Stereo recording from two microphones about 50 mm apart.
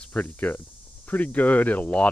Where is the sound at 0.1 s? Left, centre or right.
Left.